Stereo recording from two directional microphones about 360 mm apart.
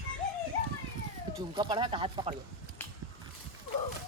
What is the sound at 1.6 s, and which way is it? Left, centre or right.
Speech, centre.